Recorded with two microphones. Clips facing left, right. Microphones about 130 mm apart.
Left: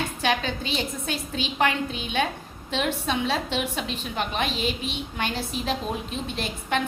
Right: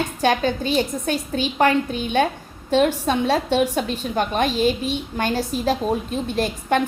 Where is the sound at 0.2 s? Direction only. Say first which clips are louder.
Right 7 dB; 45° right (ahead or behind).